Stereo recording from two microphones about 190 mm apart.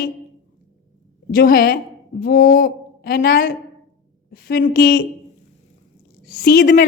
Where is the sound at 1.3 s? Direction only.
50° left (ahead or behind).